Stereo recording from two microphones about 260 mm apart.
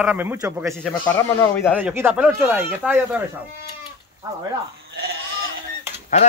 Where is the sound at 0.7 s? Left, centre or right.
Centre.